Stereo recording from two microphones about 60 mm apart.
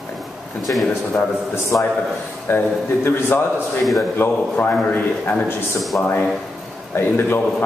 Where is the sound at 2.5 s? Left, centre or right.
Left.